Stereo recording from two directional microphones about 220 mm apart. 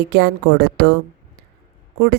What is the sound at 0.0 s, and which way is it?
Speech, 50° right (ahead or behind).